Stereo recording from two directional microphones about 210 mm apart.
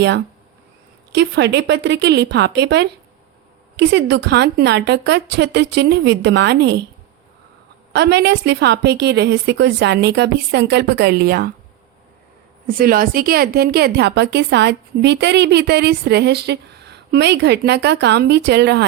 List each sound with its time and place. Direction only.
1.1 s a woman's voice: 55° right (ahead or behind)
7.9 s a woman's voice: 55° right (ahead or behind)
12.6 s a woman's voice: 45° right (ahead or behind)